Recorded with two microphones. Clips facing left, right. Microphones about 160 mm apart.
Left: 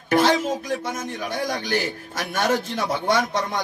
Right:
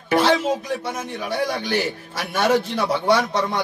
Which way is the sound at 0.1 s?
45° left (ahead or behind).